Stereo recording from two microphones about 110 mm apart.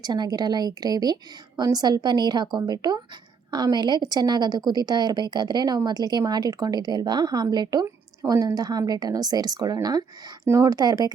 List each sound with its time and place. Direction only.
0.0 s a woman's voice: 35° right (ahead or behind)
8.2 s a woman's voice: 30° right (ahead or behind)